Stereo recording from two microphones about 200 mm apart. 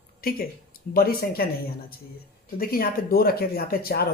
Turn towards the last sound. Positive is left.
turn(degrees=50)  # may be behind; listen again after turning